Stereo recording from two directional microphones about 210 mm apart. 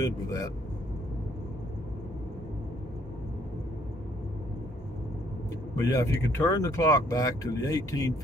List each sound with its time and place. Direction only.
0.0 s speech: 15° left (ahead or behind)
5.8 s speech: 15° left (ahead or behind)